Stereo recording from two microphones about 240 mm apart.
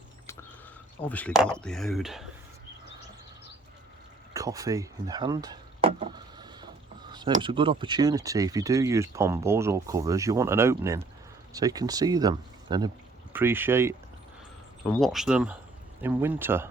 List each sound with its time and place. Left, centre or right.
1.0 s speech: centre
4.4 s a sound: centre
7.4 s speech: right
14.8 s speech: centre